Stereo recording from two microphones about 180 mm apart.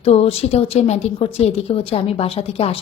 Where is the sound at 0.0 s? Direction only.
35° left (ahead or behind).